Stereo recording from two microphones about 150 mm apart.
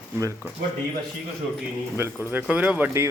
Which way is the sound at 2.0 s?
10° right (ahead or behind).